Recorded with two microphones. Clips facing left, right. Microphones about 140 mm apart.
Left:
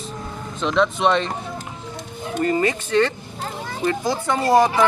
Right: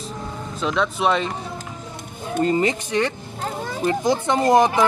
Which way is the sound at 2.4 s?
20° right (ahead or behind).